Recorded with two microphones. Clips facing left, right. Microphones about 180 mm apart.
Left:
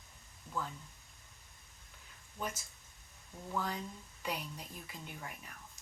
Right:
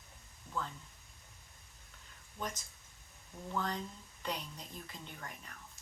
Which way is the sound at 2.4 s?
10° left (ahead or behind).